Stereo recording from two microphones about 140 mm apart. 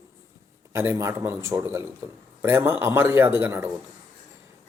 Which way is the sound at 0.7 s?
20° right (ahead or behind).